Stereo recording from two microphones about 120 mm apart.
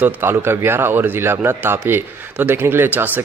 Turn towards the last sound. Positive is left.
turn(degrees=-15)  # may be behind; listen again after turning